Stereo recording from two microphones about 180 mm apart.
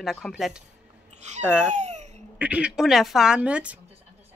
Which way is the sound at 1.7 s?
40° right (ahead or behind).